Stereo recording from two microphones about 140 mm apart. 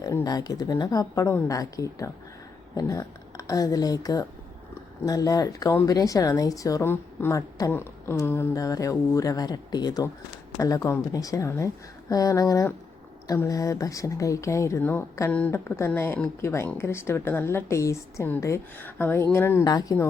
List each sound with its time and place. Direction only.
0.0 s a woman's voice: 30° left (ahead or behind)
19.6 s a woman's voice: 25° left (ahead or behind)